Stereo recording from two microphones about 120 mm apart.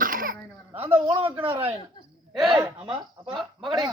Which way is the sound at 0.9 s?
50° right (ahead or behind).